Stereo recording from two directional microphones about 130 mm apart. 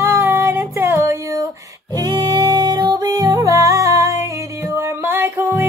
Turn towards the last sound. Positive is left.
turn(degrees=-20)  # may be behind; listen again after turning